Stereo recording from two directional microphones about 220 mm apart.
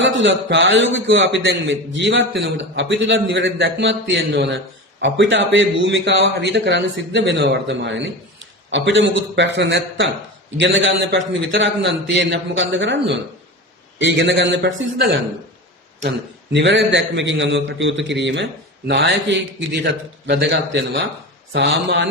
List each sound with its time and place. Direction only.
0.0 s a man's voice: 55° right (ahead or behind)